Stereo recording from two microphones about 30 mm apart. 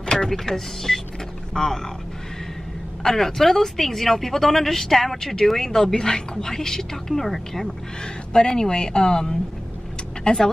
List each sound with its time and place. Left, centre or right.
0.0 s power windows: left
0.3 s a woman's voice: centre
3.0 s a woman's voice: centre
7.6 s a woman's voice: left